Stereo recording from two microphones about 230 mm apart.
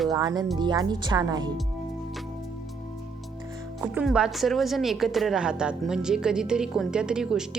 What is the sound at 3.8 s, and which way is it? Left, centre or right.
A woman's voice, centre.